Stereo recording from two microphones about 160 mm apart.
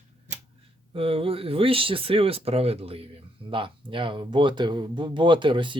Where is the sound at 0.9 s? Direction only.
35° right (ahead or behind).